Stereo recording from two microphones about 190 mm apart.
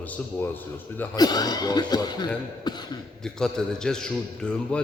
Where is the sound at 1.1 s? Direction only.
20° left (ahead or behind).